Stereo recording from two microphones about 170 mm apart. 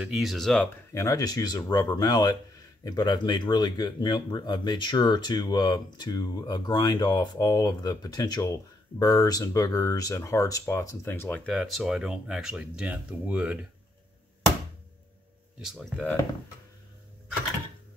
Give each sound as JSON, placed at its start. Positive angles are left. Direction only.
{"t": 0.0, "sound": "speech", "side_deg": 0}
{"t": 0.9, "sound": "speech", "side_deg": 20}
{"t": 15.6, "sound": "speech", "side_deg": 0}